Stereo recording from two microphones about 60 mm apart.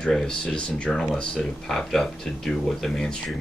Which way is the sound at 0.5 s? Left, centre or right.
Left.